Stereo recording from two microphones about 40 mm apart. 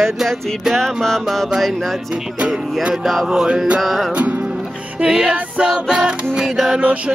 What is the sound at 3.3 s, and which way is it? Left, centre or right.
Music, right.